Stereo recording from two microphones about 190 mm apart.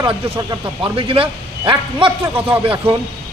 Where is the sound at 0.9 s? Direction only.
30° right (ahead or behind).